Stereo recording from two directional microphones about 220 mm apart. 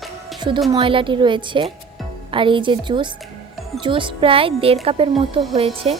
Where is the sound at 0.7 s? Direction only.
25° right (ahead or behind).